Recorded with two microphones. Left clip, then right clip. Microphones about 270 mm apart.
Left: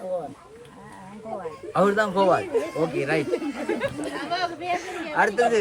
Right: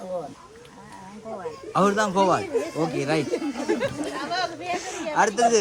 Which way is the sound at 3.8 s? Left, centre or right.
Right.